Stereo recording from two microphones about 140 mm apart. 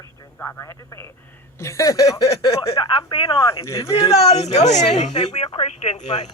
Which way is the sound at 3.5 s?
20° left (ahead or behind).